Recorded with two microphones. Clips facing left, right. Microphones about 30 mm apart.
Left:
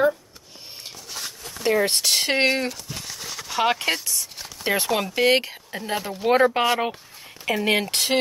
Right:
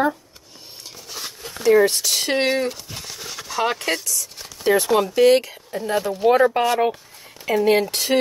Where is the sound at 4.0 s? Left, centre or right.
Left.